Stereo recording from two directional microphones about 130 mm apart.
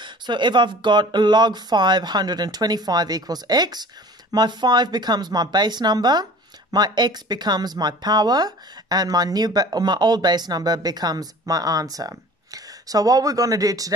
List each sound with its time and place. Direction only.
0.0 s speech: 35° right (ahead or behind)